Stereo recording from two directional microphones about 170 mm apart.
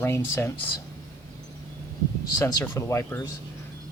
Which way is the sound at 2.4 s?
20° left (ahead or behind).